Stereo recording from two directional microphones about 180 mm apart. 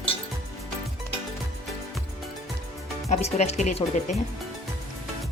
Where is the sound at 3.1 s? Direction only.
40° left (ahead or behind).